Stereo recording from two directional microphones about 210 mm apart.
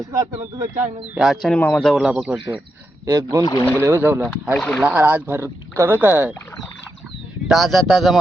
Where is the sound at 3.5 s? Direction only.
10° left (ahead or behind).